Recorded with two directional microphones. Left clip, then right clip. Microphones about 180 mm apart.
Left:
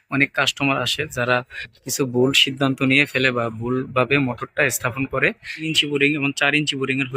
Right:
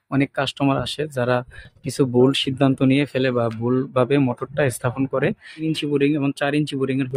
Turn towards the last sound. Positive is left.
turn(degrees=-35)  # may be behind; listen again after turning